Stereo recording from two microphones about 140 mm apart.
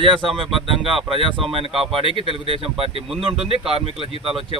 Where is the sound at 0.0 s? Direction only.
35° right (ahead or behind).